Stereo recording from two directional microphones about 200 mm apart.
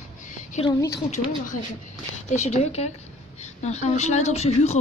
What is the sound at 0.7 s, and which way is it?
Speech, 15° left (ahead or behind).